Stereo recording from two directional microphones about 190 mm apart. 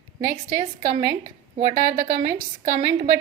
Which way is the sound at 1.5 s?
45° right (ahead or behind).